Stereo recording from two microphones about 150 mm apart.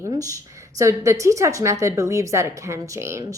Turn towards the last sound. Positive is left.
turn(degrees=-20)  # may be behind; listen again after turning